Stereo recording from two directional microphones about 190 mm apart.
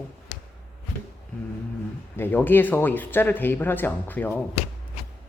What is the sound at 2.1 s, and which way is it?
Speech, 10° left (ahead or behind).